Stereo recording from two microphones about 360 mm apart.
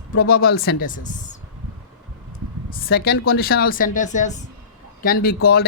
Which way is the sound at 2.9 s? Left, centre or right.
Left.